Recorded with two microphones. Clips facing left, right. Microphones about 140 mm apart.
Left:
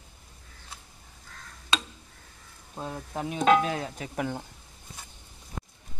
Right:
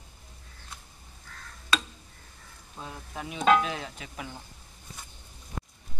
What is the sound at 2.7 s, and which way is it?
Speech, 35° left (ahead or behind).